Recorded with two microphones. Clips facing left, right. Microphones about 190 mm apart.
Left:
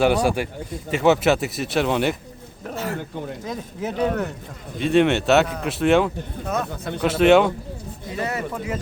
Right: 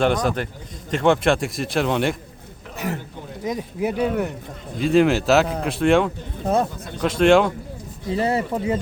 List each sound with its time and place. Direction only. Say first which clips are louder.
0.0 s speech: left 1 dB; 10° left (ahead or behind)
2.7 s a sound: even; 15° right (ahead or behind)
3.4 s speech: right 10 dB; 15° right (ahead or behind)
4.8 s speech: right 1 dB; centre (ahead or behind)
6.4 s speech: right 6 dB; 30° right (ahead or behind)
7.0 s speech: even; 5° left (ahead or behind)
8.1 s speech: right 5 dB; 30° right (ahead or behind)